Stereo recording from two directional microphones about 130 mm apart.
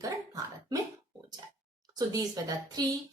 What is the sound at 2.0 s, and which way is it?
Speech, 30° right (ahead or behind).